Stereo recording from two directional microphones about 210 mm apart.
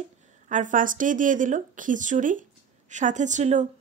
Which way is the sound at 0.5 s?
35° right (ahead or behind).